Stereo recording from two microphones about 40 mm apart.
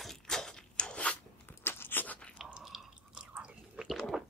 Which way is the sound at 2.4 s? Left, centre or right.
Centre.